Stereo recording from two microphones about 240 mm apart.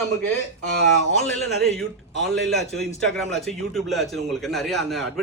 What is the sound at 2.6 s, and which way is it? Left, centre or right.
A man's voice, centre.